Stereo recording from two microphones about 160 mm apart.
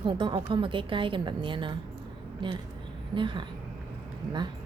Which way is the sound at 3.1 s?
30° right (ahead or behind).